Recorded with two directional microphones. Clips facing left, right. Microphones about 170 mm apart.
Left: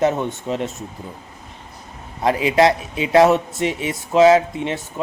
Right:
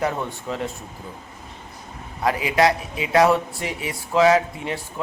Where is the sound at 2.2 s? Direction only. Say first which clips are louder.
Left 4 dB; 25° left (ahead or behind).